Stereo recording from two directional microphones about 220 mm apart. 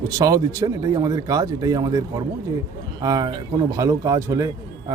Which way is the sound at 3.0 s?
15° right (ahead or behind).